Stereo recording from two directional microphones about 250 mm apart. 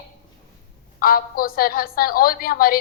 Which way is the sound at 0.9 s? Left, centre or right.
Left.